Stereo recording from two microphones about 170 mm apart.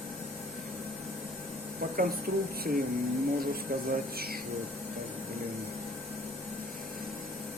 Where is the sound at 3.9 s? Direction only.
60° right (ahead or behind).